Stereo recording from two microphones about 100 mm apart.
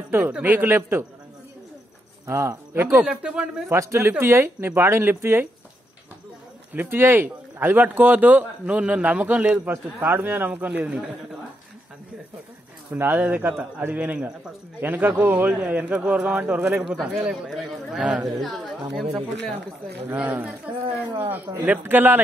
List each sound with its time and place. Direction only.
0.1 s a man's voice: 15° right (ahead or behind)
2.2 s speech: 30° right (ahead or behind)
3.0 s speech: 10° right (ahead or behind)
3.6 s a man's voice: 25° right (ahead or behind)
6.7 s a man's voice: 20° right (ahead or behind)
12.9 s a man's voice: 20° right (ahead or behind); by 18.7 s centre (ahead or behind)
20.1 s a man's voice: 15° right (ahead or behind)